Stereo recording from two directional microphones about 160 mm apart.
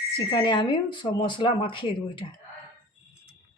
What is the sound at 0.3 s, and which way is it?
Speech, 30° left (ahead or behind).